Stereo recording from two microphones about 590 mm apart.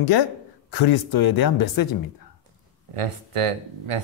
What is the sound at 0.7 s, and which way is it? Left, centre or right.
Speech, left.